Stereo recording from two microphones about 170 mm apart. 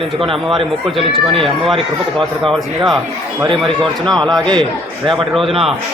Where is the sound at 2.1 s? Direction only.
Centre (ahead or behind).